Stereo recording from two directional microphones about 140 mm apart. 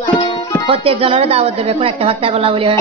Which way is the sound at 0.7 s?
40° right (ahead or behind).